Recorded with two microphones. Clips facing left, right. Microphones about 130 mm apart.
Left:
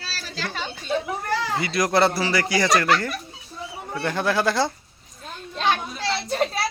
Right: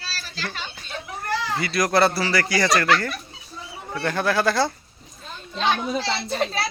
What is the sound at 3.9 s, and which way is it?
Speech, 15° left (ahead or behind).